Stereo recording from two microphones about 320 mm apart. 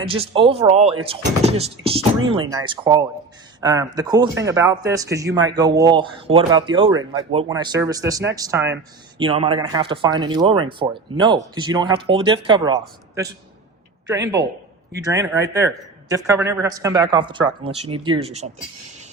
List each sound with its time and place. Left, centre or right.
0.0 s speech: centre
14.1 s speech: centre